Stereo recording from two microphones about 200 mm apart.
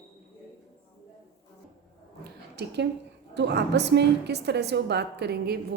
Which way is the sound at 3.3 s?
55° right (ahead or behind).